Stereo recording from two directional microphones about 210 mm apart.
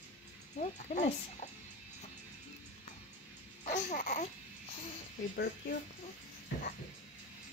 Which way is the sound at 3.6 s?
35° left (ahead or behind).